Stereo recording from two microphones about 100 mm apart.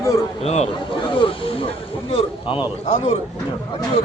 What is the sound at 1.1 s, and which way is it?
A man's voice, 60° left (ahead or behind).